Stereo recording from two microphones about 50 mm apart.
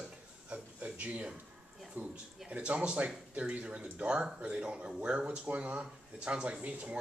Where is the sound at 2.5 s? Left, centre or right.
Right.